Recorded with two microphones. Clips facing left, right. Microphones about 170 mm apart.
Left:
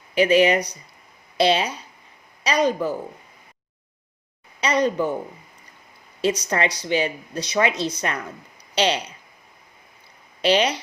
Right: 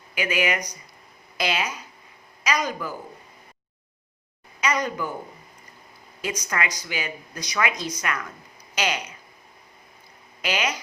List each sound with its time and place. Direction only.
0.1 s speech: 30° left (ahead or behind)
4.6 s speech: 30° left (ahead or behind)
6.2 s speech: 30° left (ahead or behind)
10.4 s speech: 30° left (ahead or behind)